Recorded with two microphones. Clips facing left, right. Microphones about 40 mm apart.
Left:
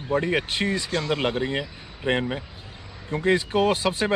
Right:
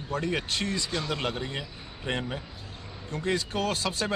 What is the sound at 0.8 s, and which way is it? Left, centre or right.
Speech, centre.